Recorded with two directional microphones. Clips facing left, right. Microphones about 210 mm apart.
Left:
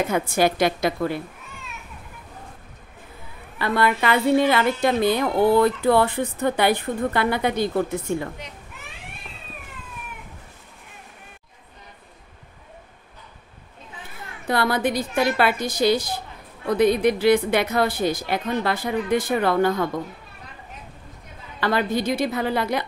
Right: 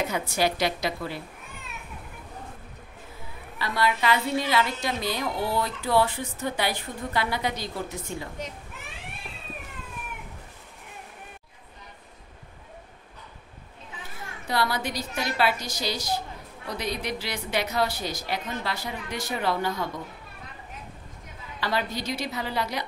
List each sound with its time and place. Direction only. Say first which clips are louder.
0.0 s a woman's voice: left 6 dB; 50° left (ahead or behind)
3.5 s a woman's voice: left 5 dB; 55° left (ahead or behind)
14.5 s a woman's voice: left 6 dB; 55° left (ahead or behind)
21.5 s a woman's voice: left 7 dB; 55° left (ahead or behind)